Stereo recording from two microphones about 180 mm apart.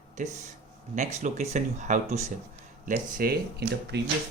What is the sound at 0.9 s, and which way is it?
Speech, 40° right (ahead or behind).